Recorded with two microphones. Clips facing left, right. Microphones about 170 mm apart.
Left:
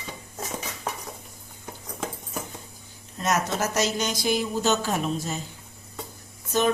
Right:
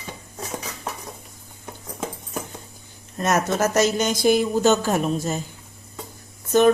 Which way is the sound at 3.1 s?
55° right (ahead or behind).